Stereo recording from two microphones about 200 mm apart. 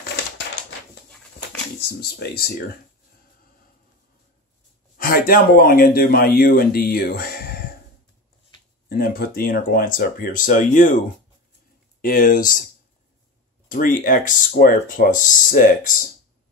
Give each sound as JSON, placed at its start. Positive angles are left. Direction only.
{"t": 1.8, "sound": "speech", "side_deg": 55}
{"t": 4.9, "sound": "speech", "side_deg": 45}
{"t": 8.8, "sound": "speech", "side_deg": 50}
{"t": 12.0, "sound": "speech", "side_deg": 45}
{"t": 13.7, "sound": "speech", "side_deg": 40}